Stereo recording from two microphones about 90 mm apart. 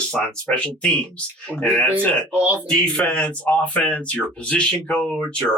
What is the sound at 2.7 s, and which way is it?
Speech, 10° left (ahead or behind).